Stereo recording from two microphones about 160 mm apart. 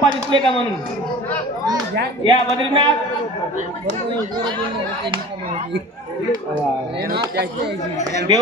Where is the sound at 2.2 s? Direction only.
30° right (ahead or behind).